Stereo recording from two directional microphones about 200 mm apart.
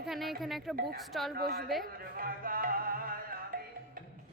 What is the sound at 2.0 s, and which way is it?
Music, 45° right (ahead or behind).